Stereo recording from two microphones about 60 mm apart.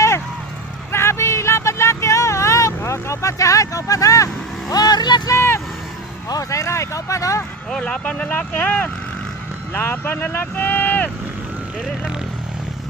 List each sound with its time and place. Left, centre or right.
0.9 s vehicle: left
4.7 s vehicle: left
5.3 s vehicle: left
6.2 s vehicle: left
7.7 s speech: centre
9.7 s speech: left